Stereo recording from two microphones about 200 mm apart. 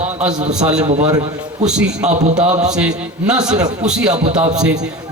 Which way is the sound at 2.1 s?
35° right (ahead or behind).